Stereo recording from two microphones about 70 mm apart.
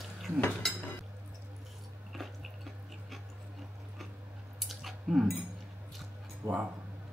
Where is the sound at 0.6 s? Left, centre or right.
Centre.